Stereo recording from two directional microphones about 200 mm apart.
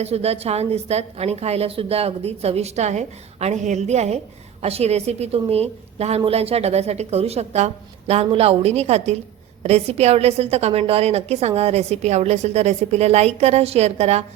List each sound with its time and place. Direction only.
0.0 s a woman's voice: 30° right (ahead or behind)